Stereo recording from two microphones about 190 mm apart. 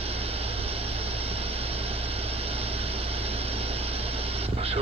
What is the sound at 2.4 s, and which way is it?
Vehicle, 30° right (ahead or behind).